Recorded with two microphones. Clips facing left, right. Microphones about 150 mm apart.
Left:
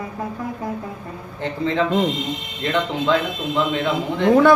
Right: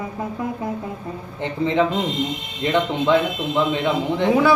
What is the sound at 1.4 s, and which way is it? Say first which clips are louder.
Speech: right 1 dB; 20° right (ahead or behind).